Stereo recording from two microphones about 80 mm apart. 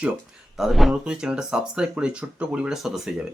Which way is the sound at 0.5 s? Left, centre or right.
Centre.